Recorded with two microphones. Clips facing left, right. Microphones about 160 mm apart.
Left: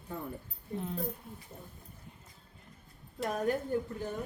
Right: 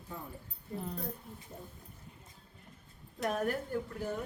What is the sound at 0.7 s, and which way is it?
Speech, centre (ahead or behind).